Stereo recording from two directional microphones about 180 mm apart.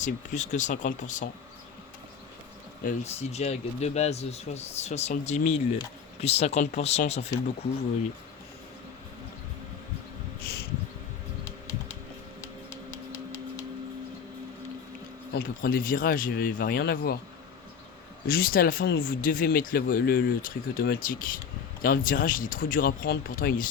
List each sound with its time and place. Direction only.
0.0 s speech: 40° left (ahead or behind)
2.8 s speech: 40° left (ahead or behind)
15.3 s speech: 60° left (ahead or behind)
18.3 s speech: 55° left (ahead or behind)